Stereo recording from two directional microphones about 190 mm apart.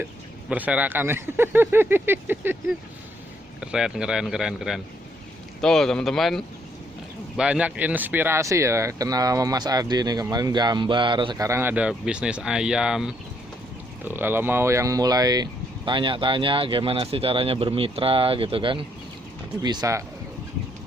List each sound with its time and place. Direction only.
0.5 s speech: 10° right (ahead or behind)
3.6 s a man's voice: 5° right (ahead or behind)